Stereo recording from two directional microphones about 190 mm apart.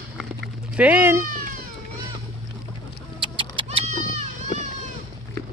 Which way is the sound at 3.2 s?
25° right (ahead or behind).